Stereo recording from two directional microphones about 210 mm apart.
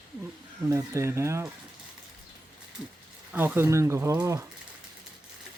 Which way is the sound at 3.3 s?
10° right (ahead or behind).